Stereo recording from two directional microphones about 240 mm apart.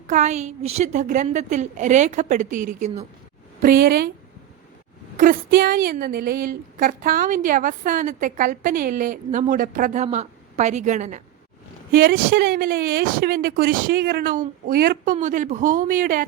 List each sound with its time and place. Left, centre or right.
0.1 s a woman's voice: right
5.1 s a woman's voice: right